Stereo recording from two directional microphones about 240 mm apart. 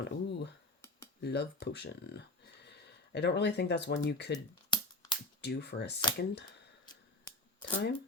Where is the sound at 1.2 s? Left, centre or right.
Left.